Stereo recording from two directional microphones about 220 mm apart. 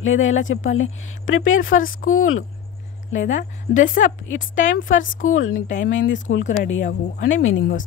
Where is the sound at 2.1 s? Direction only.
65° left (ahead or behind).